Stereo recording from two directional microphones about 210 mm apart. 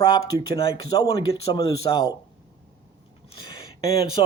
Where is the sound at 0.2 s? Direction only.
25° left (ahead or behind).